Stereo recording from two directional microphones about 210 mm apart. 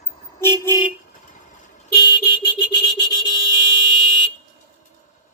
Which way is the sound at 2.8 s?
20° left (ahead or behind).